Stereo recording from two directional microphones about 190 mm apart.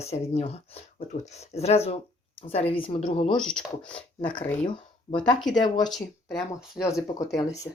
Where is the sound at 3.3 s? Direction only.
5° left (ahead or behind).